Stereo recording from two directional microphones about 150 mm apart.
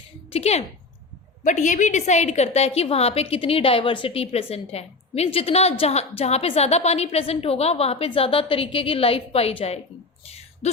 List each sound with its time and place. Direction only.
0.3 s a woman's voice: 45° left (ahead or behind)
1.5 s a woman's voice: 55° left (ahead or behind)